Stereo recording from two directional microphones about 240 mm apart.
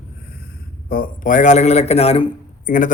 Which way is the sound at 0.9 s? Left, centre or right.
Left.